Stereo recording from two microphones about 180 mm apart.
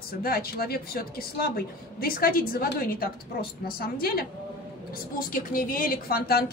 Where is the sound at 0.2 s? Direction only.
55° left (ahead or behind).